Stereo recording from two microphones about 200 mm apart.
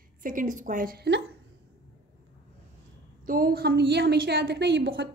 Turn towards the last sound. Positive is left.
turn(degrees=-55)  # may be behind; listen again after turning